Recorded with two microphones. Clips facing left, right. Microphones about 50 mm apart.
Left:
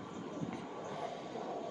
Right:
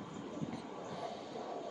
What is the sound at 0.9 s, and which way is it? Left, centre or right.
Vehicle, left.